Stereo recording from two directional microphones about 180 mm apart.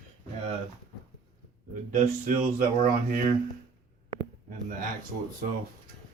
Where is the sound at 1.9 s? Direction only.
45° right (ahead or behind).